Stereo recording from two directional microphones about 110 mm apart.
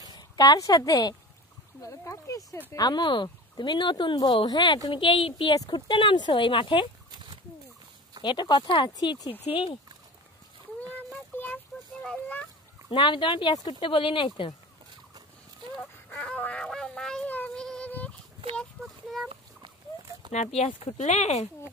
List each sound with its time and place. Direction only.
0.1 s a woman's voice: 35° left (ahead or behind)
8.2 s speech: 45° left (ahead or behind)
9.5 s speech: 55° left (ahead or behind)
11.3 s a sound: 15° left (ahead or behind)
12.9 s speech: 50° left (ahead or behind)
15.8 s a sound: 10° left (ahead or behind)
17.6 s fowl: 10° left (ahead or behind)
18.6 s child singing: centre (ahead or behind)
20.3 s speech: 80° left